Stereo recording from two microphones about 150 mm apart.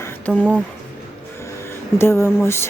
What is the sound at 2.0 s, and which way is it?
Speech, 15° left (ahead or behind).